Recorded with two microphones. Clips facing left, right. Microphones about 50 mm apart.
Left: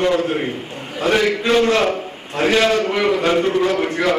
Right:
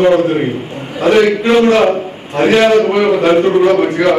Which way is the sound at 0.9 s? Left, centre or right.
Centre.